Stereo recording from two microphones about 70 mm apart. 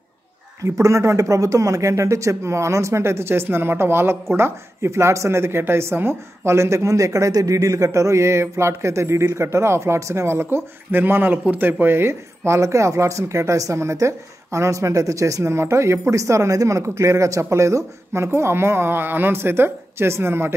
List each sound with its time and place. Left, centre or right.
0.7 s speech: right